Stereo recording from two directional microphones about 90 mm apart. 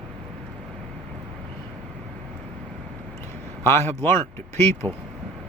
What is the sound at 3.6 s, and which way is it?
Speech, 25° left (ahead or behind).